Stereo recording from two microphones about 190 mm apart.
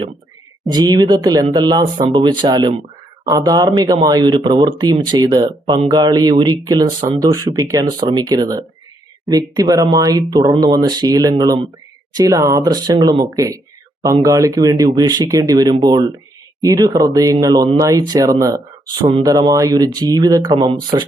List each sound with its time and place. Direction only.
0.7 s speech: 20° right (ahead or behind)